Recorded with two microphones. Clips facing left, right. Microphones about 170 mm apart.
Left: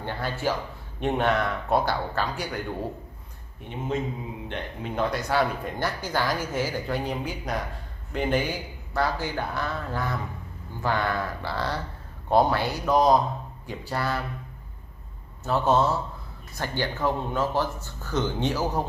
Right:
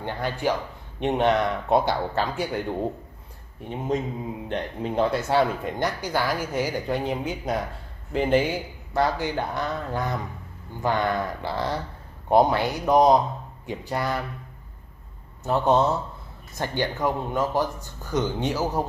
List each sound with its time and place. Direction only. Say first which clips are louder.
0.0 s speech: right 2 dB; 15° right (ahead or behind)
4.5 s speech: right 6 dB; 35° right (ahead or behind); by 14.2 s 20° right (ahead or behind)
15.4 s speech: right 2 dB; 20° right (ahead or behind)